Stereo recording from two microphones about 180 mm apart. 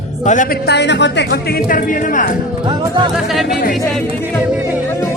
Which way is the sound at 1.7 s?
50° left (ahead or behind).